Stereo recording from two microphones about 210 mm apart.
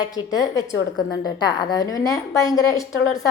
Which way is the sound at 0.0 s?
15° left (ahead or behind).